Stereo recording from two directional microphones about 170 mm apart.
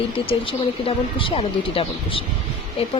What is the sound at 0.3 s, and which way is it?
Speech, 30° left (ahead or behind).